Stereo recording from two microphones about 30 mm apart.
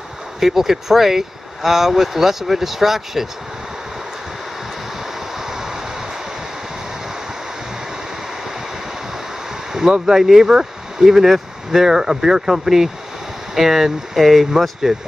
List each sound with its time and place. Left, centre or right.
0.4 s speech: centre
5.3 s vehicle: centre
9.7 s speech: centre